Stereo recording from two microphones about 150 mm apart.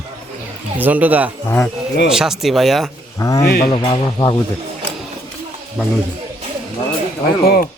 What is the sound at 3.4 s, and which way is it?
Speech, 90° left.